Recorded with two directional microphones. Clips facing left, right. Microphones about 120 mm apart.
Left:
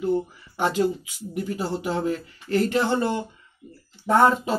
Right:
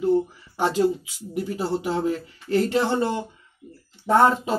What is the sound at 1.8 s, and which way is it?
Speech, 25° right (ahead or behind).